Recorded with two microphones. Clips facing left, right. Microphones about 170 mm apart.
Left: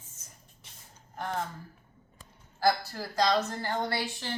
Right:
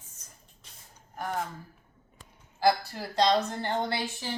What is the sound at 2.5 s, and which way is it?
A woman's voice, 20° right (ahead or behind).